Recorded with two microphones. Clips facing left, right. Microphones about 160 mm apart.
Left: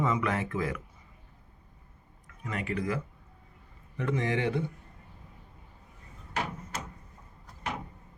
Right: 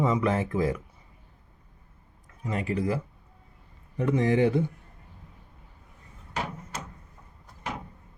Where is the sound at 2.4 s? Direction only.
30° right (ahead or behind).